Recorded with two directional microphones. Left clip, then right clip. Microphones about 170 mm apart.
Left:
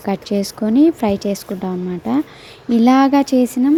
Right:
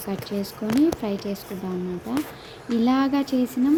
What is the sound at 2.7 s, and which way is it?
Speech, 45° left (ahead or behind).